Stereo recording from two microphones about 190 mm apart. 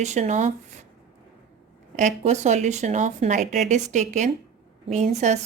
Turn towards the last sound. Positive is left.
turn(degrees=-35)  # may be behind; listen again after turning